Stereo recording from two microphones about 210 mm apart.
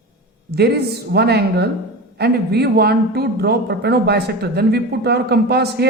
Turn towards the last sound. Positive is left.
turn(degrees=-50)  # may be behind; listen again after turning